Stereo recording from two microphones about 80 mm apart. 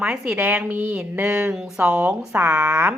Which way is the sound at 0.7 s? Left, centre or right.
Centre.